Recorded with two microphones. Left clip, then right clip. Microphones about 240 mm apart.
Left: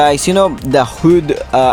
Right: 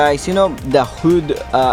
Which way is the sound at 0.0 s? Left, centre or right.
Left.